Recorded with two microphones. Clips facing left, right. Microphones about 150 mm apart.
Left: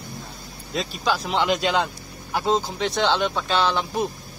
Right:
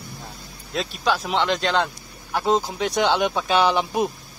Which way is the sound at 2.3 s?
5° right (ahead or behind).